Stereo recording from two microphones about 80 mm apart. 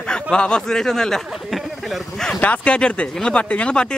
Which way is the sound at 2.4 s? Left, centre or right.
Centre.